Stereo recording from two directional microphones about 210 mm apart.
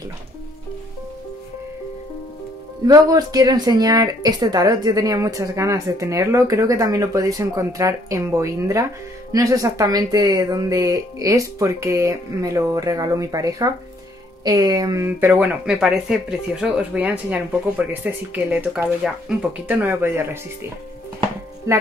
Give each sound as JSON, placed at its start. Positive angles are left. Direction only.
{"t": 2.9, "sound": "speech", "side_deg": -15}
{"t": 21.7, "sound": "speech", "side_deg": -15}